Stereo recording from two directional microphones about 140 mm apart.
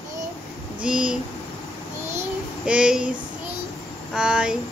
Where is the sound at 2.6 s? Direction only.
5° right (ahead or behind).